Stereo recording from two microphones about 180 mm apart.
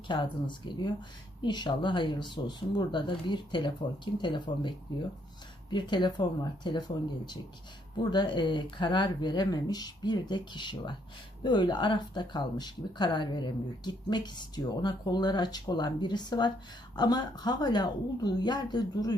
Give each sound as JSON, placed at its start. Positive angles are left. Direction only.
{"t": 0.1, "sound": "speech", "side_deg": 25}
{"t": 5.7, "sound": "speech", "side_deg": 25}